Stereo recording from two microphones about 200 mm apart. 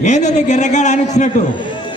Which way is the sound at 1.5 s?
25° left (ahead or behind).